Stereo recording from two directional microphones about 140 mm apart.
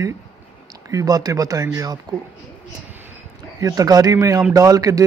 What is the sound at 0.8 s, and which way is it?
Speech, 25° right (ahead or behind).